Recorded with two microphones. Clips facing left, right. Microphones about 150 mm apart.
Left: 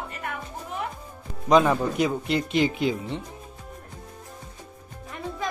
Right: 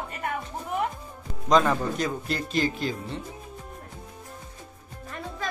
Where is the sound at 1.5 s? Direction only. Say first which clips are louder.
Left 2 dB; 15° left (ahead or behind).